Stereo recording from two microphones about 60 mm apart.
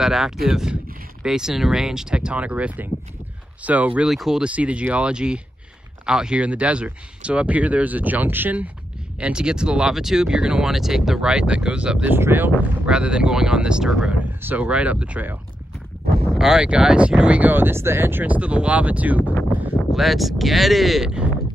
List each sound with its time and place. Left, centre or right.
0.0 s speech: centre; by 4.0 s right
4.1 s speech: centre
4.4 s speech: right
9.2 s speech: centre
12.2 s speech: right
12.8 s speech: centre
14.4 s speech: right
16.3 s speech: centre
17.4 s speech: right
18.2 s speech: right
19.9 s speech: centre